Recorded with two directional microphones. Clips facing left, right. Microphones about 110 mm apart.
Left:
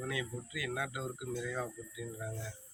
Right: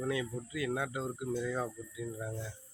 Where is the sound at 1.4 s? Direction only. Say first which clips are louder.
Right 3 dB; 15° right (ahead or behind).